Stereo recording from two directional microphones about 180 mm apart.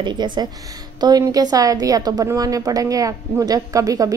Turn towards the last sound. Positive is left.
turn(degrees=-20)  # may be behind; listen again after turning